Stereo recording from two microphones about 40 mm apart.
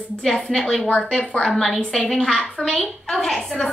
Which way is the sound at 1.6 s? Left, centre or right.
Centre.